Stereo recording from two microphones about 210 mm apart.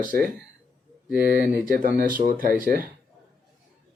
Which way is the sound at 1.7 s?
40° right (ahead or behind).